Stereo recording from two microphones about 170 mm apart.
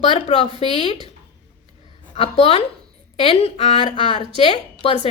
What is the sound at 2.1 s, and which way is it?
A woman's voice, 35° left (ahead or behind).